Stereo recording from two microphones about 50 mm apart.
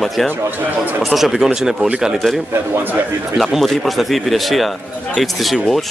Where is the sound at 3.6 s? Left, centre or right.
Centre.